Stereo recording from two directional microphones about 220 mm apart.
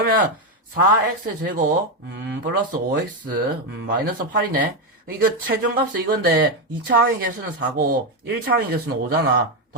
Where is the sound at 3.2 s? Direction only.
40° right (ahead or behind).